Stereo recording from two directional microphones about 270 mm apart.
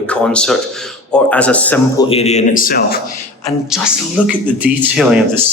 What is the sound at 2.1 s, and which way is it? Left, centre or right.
Speech, left.